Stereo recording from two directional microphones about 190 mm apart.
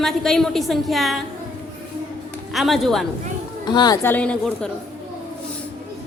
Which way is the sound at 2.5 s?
Centre (ahead or behind).